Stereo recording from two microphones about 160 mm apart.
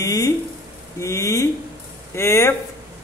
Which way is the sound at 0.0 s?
20° left (ahead or behind).